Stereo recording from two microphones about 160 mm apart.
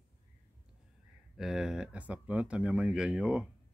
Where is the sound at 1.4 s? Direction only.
5° right (ahead or behind).